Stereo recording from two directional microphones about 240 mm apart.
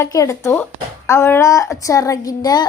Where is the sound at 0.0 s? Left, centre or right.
Centre.